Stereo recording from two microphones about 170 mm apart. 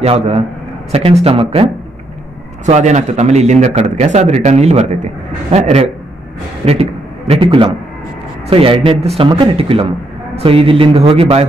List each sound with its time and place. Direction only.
0.0 s speech: 35° right (ahead or behind)
6.6 s a sound: 35° right (ahead or behind)
8.5 s speech: 35° right (ahead or behind)